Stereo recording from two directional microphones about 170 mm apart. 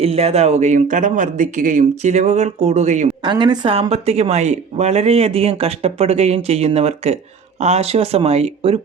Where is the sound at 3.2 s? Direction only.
25° right (ahead or behind).